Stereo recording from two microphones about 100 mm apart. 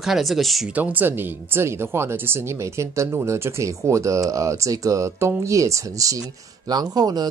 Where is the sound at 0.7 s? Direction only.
20° right (ahead or behind).